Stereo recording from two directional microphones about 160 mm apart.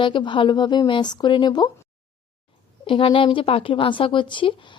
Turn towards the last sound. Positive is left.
turn(degrees=30)  # may be behind; listen again after turning